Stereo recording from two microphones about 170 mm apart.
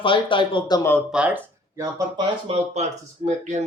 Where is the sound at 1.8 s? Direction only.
20° right (ahead or behind).